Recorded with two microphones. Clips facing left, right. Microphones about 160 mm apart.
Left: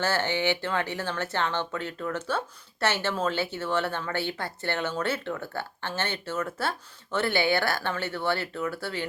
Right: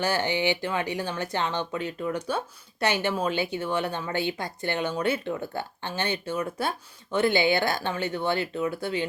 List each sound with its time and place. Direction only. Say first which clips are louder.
0.0 s speech: right 1 dB; 15° right (ahead or behind)